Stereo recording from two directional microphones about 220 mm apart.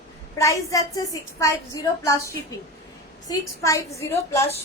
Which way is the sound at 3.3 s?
15° left (ahead or behind).